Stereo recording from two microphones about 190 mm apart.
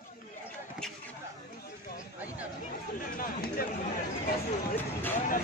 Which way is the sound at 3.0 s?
50° left (ahead or behind).